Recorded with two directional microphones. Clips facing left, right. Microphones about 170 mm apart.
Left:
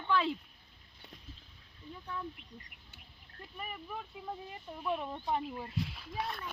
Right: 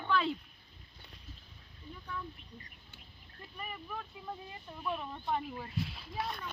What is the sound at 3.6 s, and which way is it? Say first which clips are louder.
Speech: even; 15° left (ahead or behind).